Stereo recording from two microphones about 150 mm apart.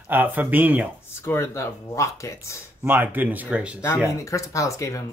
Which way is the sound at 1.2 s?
15° left (ahead or behind).